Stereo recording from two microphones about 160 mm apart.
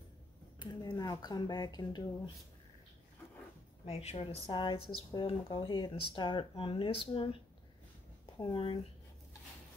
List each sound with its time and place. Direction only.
0.6 s speech: 25° left (ahead or behind)
3.8 s speech: 40° left (ahead or behind)
8.4 s speech: 30° left (ahead or behind)